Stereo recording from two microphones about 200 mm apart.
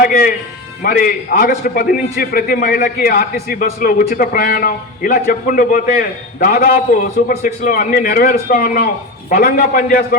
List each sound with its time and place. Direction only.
0.0 s a man's voice: 45° left (ahead or behind)